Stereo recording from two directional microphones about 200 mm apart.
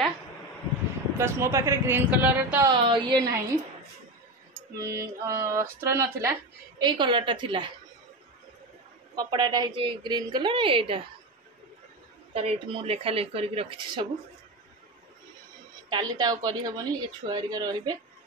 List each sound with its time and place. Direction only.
1.1 s speech: 15° right (ahead or behind)
2.7 s speech: 25° right (ahead or behind)
4.7 s speech: 15° right (ahead or behind)
9.1 s speech: 20° right (ahead or behind)
12.4 s speech: 30° right (ahead or behind)
15.9 s speech: 20° right (ahead or behind)